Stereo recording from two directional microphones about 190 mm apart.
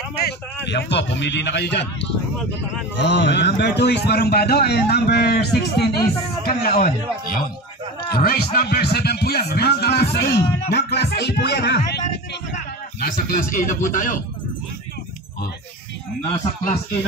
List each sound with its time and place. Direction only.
0.2 s a man's voice: 60° left (ahead or behind)
8.1 s a man's voice: 55° left (ahead or behind)
13.0 s speech: 45° left (ahead or behind)